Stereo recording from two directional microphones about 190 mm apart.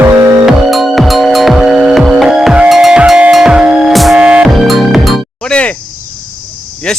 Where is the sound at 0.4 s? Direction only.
Centre (ahead or behind).